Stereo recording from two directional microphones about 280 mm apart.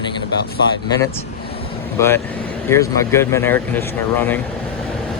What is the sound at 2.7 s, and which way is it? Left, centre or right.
Speech, centre.